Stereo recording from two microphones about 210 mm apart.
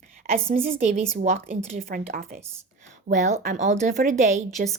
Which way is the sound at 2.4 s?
10° right (ahead or behind).